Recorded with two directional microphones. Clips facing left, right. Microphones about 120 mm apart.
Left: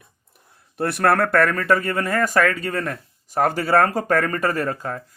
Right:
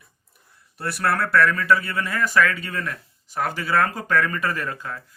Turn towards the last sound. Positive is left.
turn(degrees=40)  # may be behind; listen again after turning